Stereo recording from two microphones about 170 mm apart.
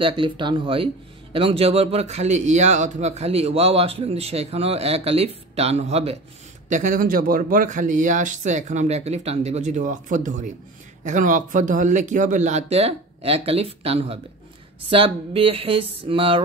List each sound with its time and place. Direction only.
0.0 s a man's voice: 30° right (ahead or behind)
6.7 s a man's voice: 50° right (ahead or behind); by 16.3 s 30° right (ahead or behind)